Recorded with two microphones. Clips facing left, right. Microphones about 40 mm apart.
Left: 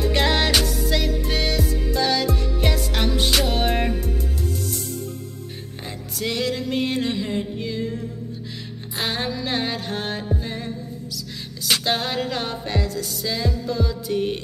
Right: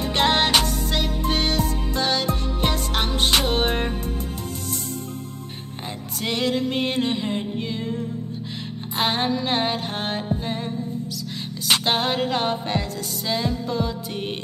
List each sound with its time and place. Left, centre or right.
0.0 s music: right
6.2 s music: right
8.9 s music: right